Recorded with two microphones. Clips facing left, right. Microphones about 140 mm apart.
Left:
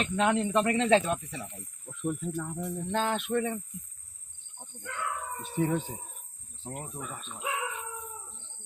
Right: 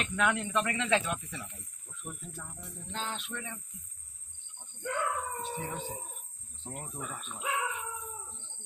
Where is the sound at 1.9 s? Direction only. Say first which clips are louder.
Left 13 dB; 75° left (ahead or behind); by 3.6 s 45° left (ahead or behind).